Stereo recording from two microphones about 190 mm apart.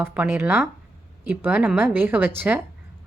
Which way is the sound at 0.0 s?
10° right (ahead or behind).